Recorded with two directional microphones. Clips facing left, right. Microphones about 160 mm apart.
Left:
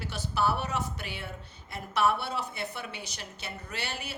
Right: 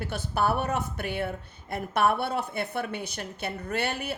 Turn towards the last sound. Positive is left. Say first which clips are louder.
# right 8 dB
turn(degrees=-55)  # may be behind; listen again after turning